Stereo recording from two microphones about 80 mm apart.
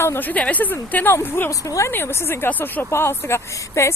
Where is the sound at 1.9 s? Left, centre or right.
Left.